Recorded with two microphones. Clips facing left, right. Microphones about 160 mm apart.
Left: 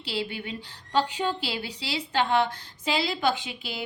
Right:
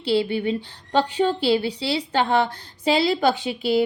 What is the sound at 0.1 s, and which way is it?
A woman's voice, 30° right (ahead or behind).